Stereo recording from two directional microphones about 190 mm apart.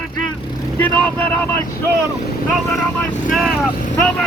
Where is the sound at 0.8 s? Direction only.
10° left (ahead or behind).